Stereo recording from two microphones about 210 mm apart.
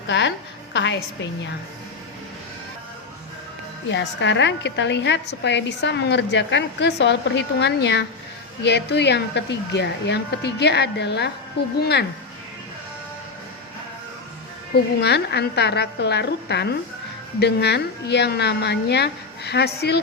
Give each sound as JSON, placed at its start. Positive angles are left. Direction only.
{"t": 0.1, "sound": "a sound", "side_deg": 60}
{"t": 3.8, "sound": "a woman's voice", "side_deg": 60}
{"t": 15.0, "sound": "a woman's voice", "side_deg": 50}